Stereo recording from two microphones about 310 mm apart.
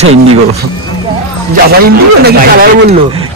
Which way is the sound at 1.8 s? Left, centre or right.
Right.